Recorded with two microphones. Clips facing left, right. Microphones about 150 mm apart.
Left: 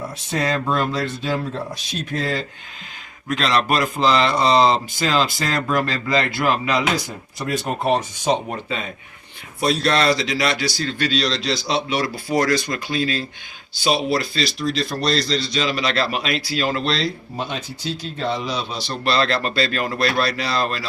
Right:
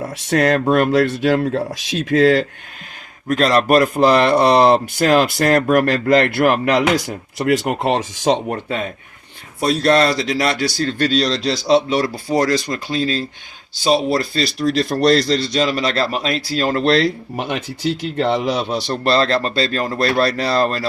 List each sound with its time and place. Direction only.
0.2 s speech: 75° right (ahead or behind)
3.2 s speech: 45° right (ahead or behind); by 8.5 s 80° right
9.6 s speech: 45° right (ahead or behind)
13.8 s speech: 40° right (ahead or behind)
14.8 s speech: 60° right (ahead or behind)
19.1 s speech: 35° right (ahead or behind)